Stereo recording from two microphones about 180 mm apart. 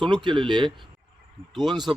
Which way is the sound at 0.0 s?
25° right (ahead or behind).